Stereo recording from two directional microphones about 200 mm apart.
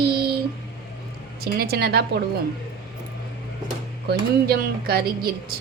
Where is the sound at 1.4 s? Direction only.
50° right (ahead or behind).